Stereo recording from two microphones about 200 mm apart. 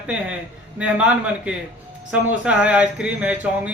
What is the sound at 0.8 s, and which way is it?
A man's voice, 5° right (ahead or behind).